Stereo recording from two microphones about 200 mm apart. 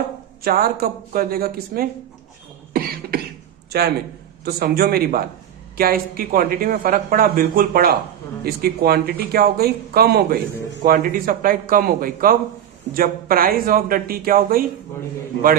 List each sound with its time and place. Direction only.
0.4 s a man's voice: 50° right (ahead or behind)
2.7 s cough: 50° right (ahead or behind)
3.7 s a man's voice: 55° right (ahead or behind)